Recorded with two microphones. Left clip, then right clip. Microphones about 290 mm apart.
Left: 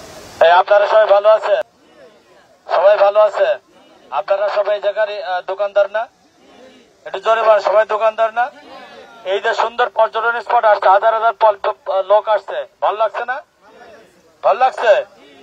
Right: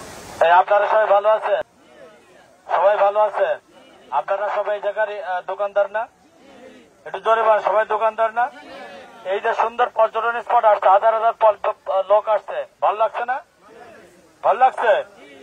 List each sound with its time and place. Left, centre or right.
0.4 s a man's voice: left
7.1 s speech: left
14.4 s speech: left